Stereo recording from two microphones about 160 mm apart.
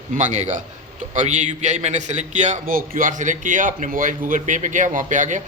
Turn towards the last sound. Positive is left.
turn(degrees=-50)  # may be behind; listen again after turning